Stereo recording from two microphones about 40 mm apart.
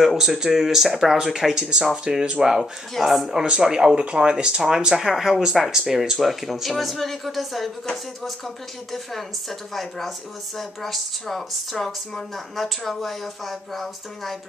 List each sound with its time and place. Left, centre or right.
0.2 s speech: centre
2.6 s speech: centre
3.3 s speech: right; by 7.7 s centre
8.9 s speech: centre